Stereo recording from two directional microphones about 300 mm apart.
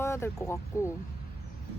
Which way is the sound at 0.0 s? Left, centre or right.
Centre.